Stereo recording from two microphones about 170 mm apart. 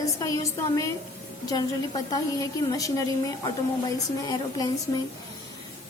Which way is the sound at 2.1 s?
20° left (ahead or behind).